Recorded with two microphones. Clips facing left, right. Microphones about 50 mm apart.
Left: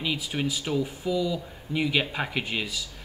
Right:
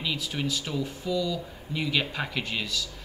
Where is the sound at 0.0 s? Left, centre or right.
Centre.